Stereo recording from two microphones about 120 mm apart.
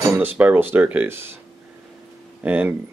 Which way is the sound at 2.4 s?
15° right (ahead or behind).